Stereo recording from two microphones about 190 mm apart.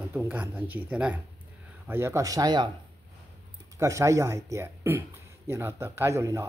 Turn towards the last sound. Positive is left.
turn(degrees=-15)  # may be behind; listen again after turning